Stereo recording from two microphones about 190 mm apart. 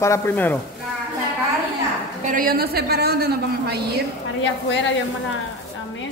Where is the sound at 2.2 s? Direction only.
45° right (ahead or behind).